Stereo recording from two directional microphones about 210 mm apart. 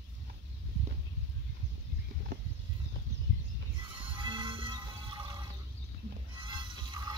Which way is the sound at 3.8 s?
25° right (ahead or behind).